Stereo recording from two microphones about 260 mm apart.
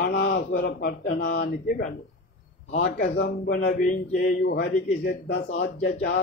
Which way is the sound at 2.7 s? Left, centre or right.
Left.